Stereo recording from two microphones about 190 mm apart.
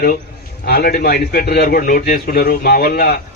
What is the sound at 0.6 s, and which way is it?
A man's voice, 55° left (ahead or behind).